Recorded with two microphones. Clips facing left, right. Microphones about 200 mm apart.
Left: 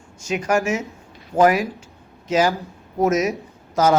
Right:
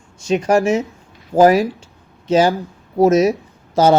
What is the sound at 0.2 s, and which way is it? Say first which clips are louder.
A man's voice: right 6 dB; 30° right (ahead or behind).